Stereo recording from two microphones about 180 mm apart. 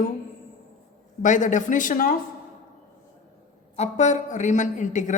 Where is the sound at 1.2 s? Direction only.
45° left (ahead or behind).